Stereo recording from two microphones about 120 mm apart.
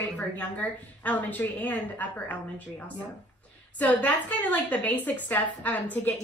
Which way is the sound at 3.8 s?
10° left (ahead or behind).